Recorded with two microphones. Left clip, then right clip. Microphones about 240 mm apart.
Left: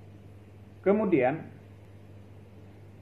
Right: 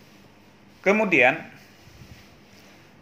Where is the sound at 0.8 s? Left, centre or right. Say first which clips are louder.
Right 6 dB; right.